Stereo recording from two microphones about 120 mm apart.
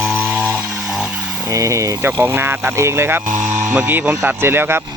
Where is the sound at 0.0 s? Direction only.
15° right (ahead or behind).